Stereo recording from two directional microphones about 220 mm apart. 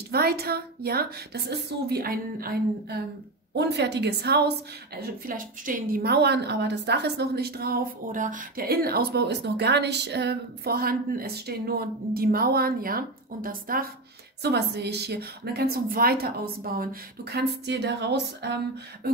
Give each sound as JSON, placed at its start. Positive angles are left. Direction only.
{"t": 0.1, "sound": "a woman's voice", "side_deg": -45}